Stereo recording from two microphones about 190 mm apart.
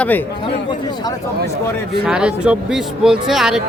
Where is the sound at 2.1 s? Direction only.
5° right (ahead or behind).